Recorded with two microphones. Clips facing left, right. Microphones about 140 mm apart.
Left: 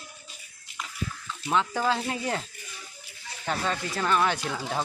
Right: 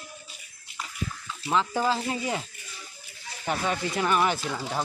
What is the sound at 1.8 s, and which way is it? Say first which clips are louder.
Speech: even; centre (ahead or behind).